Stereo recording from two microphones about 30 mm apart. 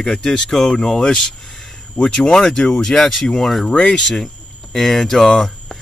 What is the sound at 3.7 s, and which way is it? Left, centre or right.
Speech, left.